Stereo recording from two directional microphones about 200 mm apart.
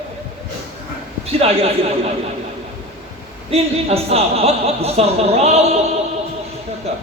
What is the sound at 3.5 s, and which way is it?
Speech, 30° right (ahead or behind).